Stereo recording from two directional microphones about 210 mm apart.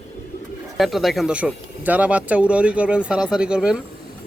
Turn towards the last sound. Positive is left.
turn(degrees=-5)  # may be behind; listen again after turning